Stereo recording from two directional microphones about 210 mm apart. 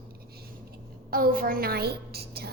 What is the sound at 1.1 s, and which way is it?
A woman's voice, 45° right (ahead or behind).